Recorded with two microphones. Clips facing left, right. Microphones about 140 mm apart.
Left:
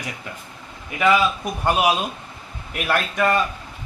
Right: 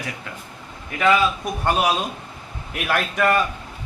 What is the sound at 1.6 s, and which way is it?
A man's voice, 5° left (ahead or behind).